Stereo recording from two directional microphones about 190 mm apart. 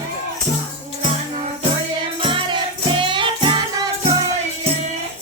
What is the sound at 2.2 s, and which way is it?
Music, 25° right (ahead or behind).